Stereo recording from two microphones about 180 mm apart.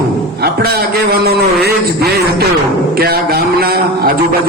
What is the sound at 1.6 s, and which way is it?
A man's voice, 60° right (ahead or behind).